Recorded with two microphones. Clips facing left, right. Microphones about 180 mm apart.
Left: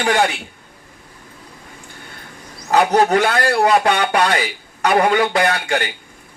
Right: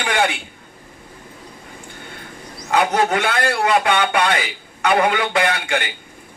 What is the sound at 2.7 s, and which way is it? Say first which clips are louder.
Speech: left 4 dB; 40° left (ahead or behind).